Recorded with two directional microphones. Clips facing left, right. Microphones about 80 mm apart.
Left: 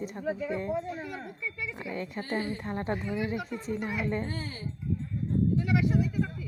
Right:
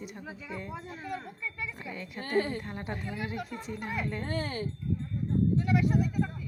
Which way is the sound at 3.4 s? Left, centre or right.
Right.